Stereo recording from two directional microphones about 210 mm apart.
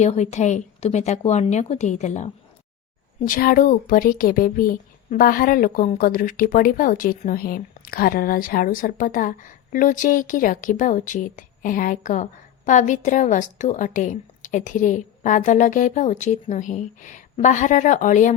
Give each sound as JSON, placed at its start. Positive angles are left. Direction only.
{"t": 0.0, "sound": "speech", "side_deg": 30}